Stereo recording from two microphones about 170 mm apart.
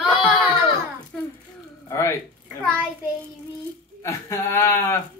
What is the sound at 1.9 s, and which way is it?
Speech, 15° left (ahead or behind).